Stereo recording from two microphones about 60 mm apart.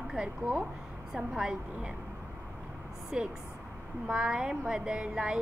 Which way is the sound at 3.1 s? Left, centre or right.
Centre.